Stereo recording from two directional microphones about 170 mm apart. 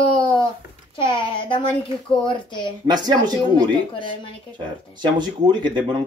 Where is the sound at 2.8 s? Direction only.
25° right (ahead or behind).